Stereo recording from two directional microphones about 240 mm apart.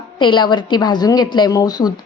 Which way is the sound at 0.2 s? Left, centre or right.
Centre.